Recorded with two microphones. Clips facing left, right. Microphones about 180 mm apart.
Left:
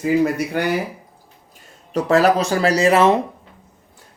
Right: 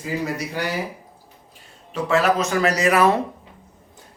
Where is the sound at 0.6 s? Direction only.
60° left (ahead or behind).